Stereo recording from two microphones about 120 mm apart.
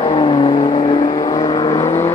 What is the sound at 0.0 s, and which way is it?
Vehicle, 45° left (ahead or behind).